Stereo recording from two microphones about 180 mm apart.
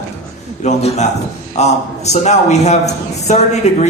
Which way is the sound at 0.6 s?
40° left (ahead or behind).